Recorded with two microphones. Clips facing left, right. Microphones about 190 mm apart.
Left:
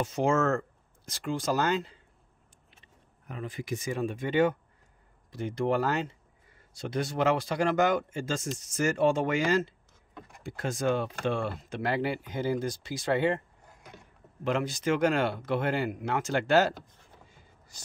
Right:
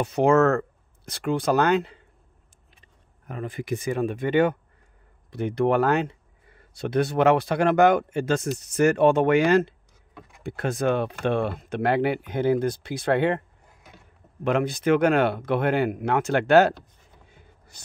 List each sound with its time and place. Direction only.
0.0 s speech: 60° right (ahead or behind)
2.8 s speech: 50° right (ahead or behind)
14.4 s speech: 60° right (ahead or behind)
17.3 s a sound: 60° right (ahead or behind)